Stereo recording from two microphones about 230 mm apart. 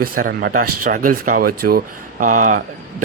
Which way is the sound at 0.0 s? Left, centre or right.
Right.